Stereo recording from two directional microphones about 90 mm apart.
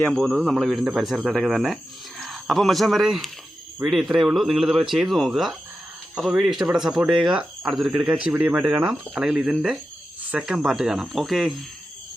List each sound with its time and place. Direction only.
0.2 s speech: centre (ahead or behind)
8.0 s speech: 15° right (ahead or behind)